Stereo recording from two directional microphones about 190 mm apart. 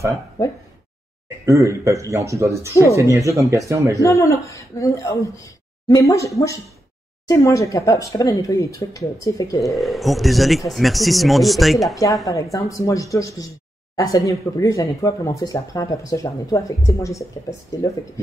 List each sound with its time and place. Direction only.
0.4 s speech: 20° left (ahead or behind)
1.4 s speech: 15° right (ahead or behind)
4.0 s speech: 15° left (ahead or behind)
9.6 s speech: centre (ahead or behind)
11.9 s speech: 15° left (ahead or behind)